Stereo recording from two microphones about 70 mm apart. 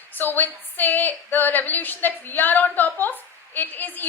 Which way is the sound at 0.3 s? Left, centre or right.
Left.